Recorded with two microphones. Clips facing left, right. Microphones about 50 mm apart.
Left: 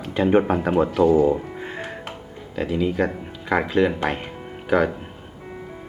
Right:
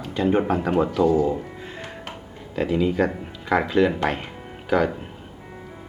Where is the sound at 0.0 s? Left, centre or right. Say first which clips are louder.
Left 3 dB; left.